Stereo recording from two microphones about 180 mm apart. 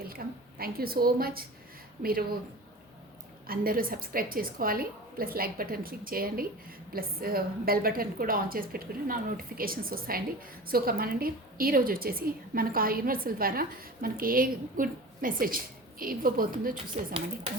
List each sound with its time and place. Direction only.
0.1 s a woman's voice: 55° right (ahead or behind)
3.4 s a woman's voice: 55° right (ahead or behind)